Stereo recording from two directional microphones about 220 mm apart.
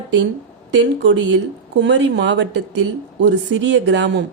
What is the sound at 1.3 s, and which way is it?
A man's voice, 55° right (ahead or behind).